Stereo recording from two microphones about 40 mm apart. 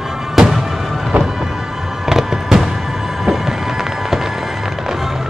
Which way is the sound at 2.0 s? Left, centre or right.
Centre.